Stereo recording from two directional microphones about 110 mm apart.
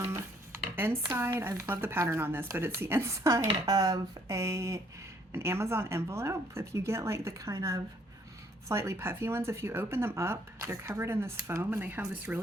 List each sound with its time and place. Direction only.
1.1 s speech: 20° right (ahead or behind)